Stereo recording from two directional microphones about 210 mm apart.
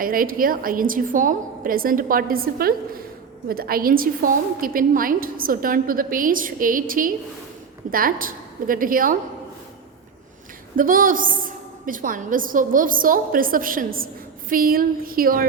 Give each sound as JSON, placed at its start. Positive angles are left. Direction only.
{"t": 0.0, "sound": "a woman's voice", "side_deg": -40}
{"t": 10.8, "sound": "a woman's voice", "side_deg": -40}